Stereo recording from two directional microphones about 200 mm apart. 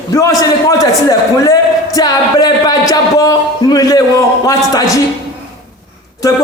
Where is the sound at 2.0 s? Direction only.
20° left (ahead or behind).